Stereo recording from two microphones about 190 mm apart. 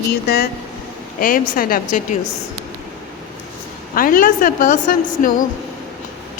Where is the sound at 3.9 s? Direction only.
50° left (ahead or behind).